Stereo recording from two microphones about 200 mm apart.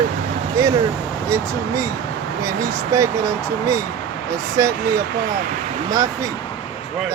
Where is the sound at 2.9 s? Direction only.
15° right (ahead or behind).